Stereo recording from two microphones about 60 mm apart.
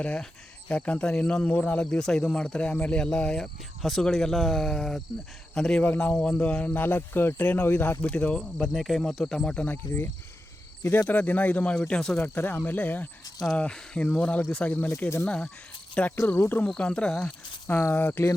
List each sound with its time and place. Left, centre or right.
0.0 s speech: centre
3.8 s speech: centre
6.4 s speech: left
8.0 s speech: centre
8.6 s speech: centre
9.0 s speech: centre
9.6 s speech: left
11.1 s speech: left; by 12.2 s centre
12.2 s speech: left
13.6 s speech: centre
16.2 s speech: left
16.7 s speech: centre
17.2 s a sound: left
17.9 s speech: left